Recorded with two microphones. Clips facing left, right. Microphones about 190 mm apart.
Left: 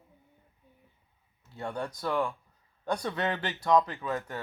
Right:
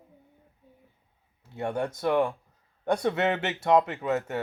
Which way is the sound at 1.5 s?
25° right (ahead or behind).